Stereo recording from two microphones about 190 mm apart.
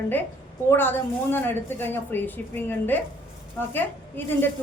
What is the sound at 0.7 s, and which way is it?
Speech, 10° left (ahead or behind).